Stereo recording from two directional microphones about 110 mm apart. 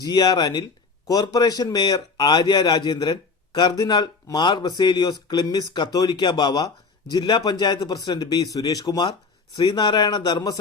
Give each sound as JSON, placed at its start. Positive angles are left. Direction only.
{"t": 0.0, "sound": "a man's voice", "side_deg": 40}